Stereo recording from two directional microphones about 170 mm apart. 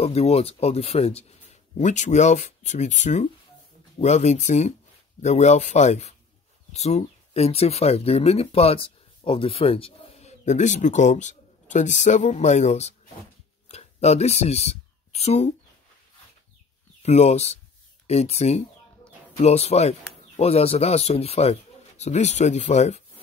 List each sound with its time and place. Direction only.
0.0 s speech: 40° left (ahead or behind)
17.0 s speech: 40° left (ahead or behind)